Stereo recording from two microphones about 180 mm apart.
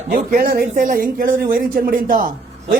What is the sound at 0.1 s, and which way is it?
Speech, 50° right (ahead or behind).